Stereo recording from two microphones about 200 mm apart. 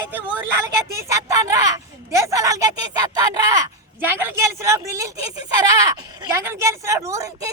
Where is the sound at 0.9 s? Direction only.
15° right (ahead or behind).